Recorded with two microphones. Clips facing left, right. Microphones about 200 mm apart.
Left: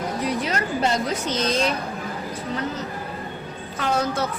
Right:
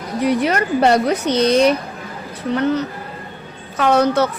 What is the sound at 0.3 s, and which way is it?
Speech, 65° right (ahead or behind).